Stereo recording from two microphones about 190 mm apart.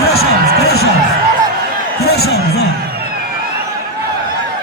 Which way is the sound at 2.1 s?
55° left (ahead or behind).